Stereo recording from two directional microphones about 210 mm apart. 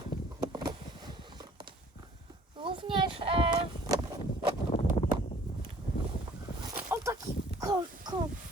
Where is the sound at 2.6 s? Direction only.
25° right (ahead or behind).